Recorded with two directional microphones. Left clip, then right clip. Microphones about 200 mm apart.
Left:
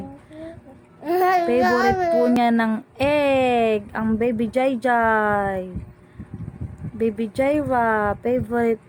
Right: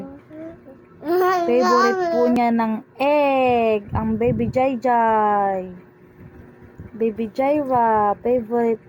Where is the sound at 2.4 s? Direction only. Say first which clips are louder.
Even; 20° left (ahead or behind).